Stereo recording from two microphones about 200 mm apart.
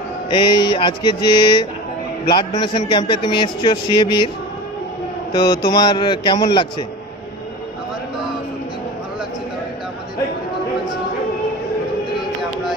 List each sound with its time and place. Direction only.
0.3 s speech: 20° left (ahead or behind)
5.3 s speech: 20° left (ahead or behind)